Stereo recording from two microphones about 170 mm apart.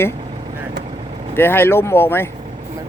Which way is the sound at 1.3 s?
15° left (ahead or behind).